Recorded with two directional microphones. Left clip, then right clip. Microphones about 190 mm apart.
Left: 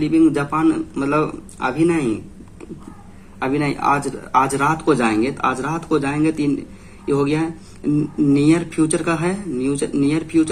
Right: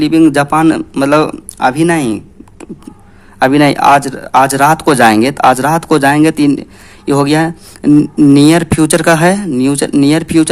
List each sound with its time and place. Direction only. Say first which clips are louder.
0.0 s a man's voice: right 8 dB; 50° right (ahead or behind)
3.3 s speech: right 13 dB; 55° right (ahead or behind)